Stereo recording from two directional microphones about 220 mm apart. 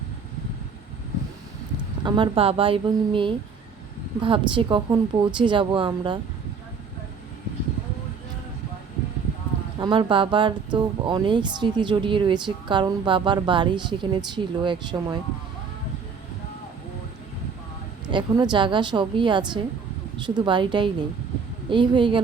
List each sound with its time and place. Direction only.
2.0 s speech: 20° right (ahead or behind)
9.7 s speech: 20° right (ahead or behind)
18.0 s a woman's voice: 20° right (ahead or behind)